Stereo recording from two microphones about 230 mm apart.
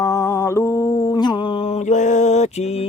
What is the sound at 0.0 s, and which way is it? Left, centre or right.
Mantra, centre.